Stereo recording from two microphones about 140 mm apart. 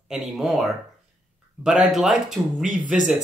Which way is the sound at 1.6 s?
5° right (ahead or behind).